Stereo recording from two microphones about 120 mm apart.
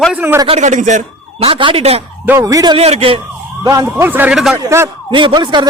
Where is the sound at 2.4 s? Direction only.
35° right (ahead or behind).